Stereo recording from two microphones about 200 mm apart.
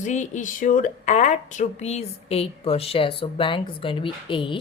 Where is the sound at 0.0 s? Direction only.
35° left (ahead or behind).